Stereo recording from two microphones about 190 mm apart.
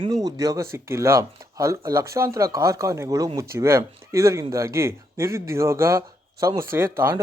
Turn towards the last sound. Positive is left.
turn(degrees=-15)  # may be behind; listen again after turning